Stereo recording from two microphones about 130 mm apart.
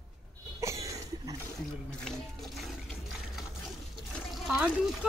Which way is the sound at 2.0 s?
5° left (ahead or behind).